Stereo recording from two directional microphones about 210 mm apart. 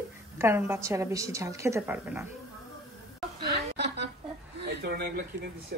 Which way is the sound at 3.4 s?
50° right (ahead or behind).